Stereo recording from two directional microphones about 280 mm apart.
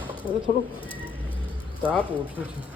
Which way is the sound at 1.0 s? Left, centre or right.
Centre.